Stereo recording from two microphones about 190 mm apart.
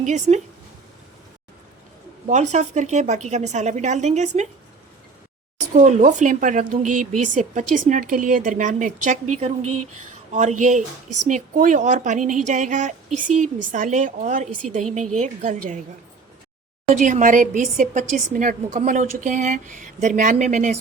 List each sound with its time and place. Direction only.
0.0 s a woman's voice: 40° right (ahead or behind)
2.2 s a woman's voice: 40° right (ahead or behind)
5.7 s a woman's voice: 40° right (ahead or behind)
16.9 s a woman's voice: 40° right (ahead or behind)